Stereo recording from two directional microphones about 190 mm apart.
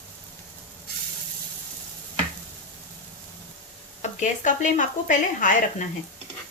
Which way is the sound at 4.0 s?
40° left (ahead or behind).